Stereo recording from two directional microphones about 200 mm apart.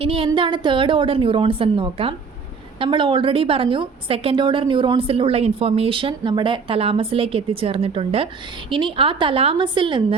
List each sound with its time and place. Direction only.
0.0 s a woman's voice: 30° right (ahead or behind)